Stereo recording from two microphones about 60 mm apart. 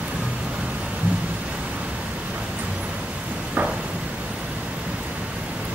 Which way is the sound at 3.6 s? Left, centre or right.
Right.